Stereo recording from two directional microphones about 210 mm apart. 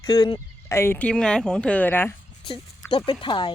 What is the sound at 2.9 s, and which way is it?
Speech, 25° left (ahead or behind).